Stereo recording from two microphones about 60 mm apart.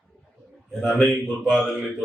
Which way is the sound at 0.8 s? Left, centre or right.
Centre.